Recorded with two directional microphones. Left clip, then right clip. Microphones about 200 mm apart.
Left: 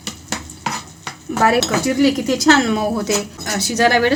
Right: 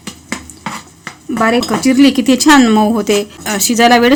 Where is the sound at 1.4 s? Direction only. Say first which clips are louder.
Right 2 dB; 55° right (ahead or behind).